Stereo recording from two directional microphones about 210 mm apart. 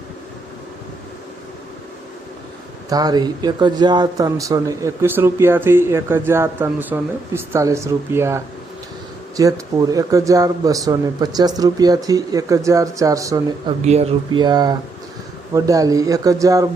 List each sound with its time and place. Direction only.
2.9 s speech: 20° right (ahead or behind)
13.8 s speech: 30° right (ahead or behind)